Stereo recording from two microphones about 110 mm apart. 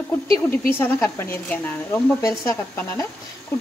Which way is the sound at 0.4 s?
20° left (ahead or behind).